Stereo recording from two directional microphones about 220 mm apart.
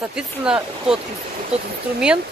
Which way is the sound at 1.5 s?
30° right (ahead or behind).